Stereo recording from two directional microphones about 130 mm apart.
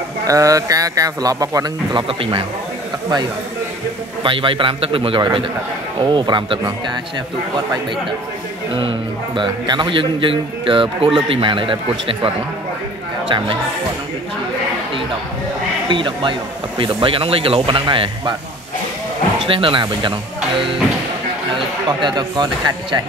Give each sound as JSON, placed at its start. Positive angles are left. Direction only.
{"t": 0.3, "sound": "speech", "side_deg": -25}
{"t": 4.2, "sound": "a man's voice", "side_deg": -40}
{"t": 8.7, "sound": "a man's voice", "side_deg": -40}
{"t": 15.9, "sound": "a man's voice", "side_deg": -40}
{"t": 19.4, "sound": "a man's voice", "side_deg": -40}
{"t": 21.5, "sound": "speech", "side_deg": -35}